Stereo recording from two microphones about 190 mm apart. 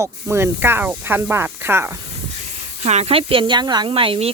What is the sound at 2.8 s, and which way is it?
Speech, 35° right (ahead or behind).